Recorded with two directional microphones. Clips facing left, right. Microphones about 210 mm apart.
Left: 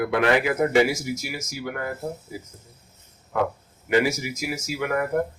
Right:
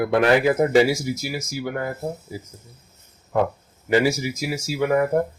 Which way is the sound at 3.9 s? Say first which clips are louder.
Right 2 dB; 30° right (ahead or behind).